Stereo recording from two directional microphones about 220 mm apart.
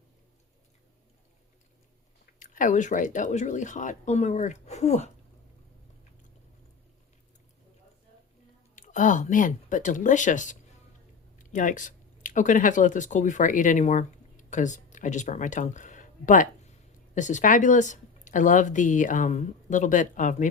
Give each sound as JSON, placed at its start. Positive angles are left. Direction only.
{"t": 2.4, "sound": "speech", "side_deg": 35}
{"t": 8.7, "sound": "speech", "side_deg": 35}